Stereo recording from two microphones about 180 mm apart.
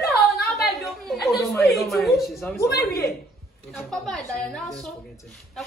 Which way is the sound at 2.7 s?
60° left (ahead or behind).